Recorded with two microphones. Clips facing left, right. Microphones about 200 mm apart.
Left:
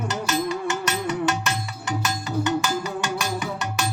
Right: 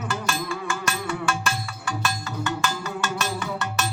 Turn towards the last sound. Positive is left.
turn(degrees=15)  # may be behind; listen again after turning